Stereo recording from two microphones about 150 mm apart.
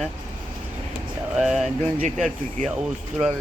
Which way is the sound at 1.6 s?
55° right (ahead or behind).